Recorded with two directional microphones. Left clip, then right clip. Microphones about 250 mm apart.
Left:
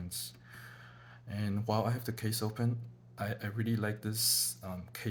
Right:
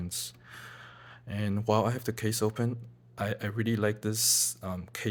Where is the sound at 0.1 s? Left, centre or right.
Right.